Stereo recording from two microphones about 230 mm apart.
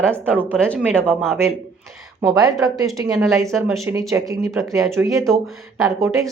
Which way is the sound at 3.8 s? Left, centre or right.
Centre.